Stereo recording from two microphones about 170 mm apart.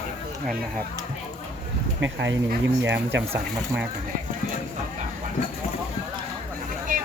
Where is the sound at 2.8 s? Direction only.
90° right.